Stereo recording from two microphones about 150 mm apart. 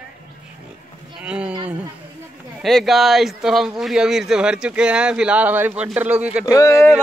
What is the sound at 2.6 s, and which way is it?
Speech, centre (ahead or behind).